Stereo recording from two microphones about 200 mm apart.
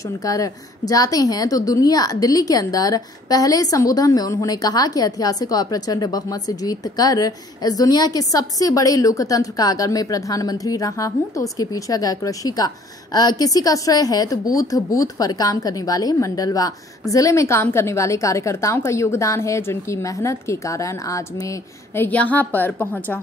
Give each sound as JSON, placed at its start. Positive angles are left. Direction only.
{"t": 0.2, "sound": "a woman's voice", "side_deg": 15}